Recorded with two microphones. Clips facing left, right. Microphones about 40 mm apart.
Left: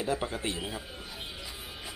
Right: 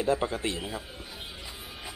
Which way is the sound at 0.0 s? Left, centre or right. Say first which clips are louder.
Right 4 dB; centre.